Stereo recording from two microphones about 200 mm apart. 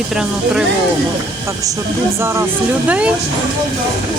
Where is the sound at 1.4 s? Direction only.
15° right (ahead or behind).